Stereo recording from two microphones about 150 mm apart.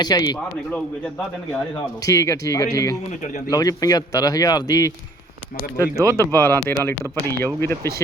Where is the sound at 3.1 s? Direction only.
55° left (ahead or behind).